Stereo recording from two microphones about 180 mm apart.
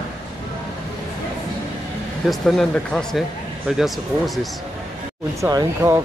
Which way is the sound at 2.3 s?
5° left (ahead or behind).